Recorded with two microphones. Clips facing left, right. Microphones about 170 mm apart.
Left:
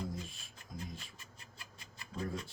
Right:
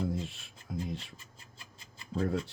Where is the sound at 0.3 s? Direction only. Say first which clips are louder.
Right 9 dB; 70° right (ahead or behind).